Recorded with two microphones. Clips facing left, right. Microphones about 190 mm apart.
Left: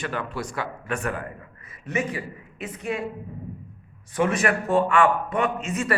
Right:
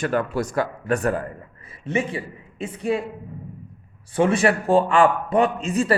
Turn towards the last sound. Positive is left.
turn(degrees=-35)  # may be behind; listen again after turning